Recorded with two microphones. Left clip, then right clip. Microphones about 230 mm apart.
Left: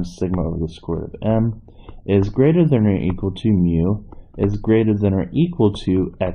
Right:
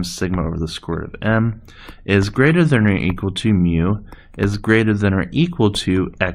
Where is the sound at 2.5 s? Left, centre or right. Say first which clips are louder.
Right 1 dB; right.